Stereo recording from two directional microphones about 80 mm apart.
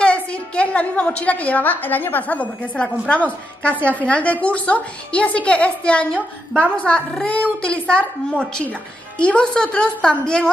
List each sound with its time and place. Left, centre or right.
0.0 s a woman's voice: centre
9.2 s a woman's voice: centre